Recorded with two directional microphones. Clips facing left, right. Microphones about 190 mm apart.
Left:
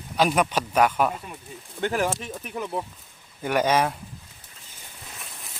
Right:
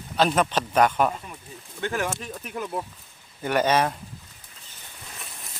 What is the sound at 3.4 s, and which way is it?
Speech, 10° left (ahead or behind).